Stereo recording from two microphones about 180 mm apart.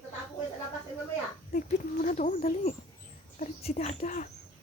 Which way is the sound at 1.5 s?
50° left (ahead or behind).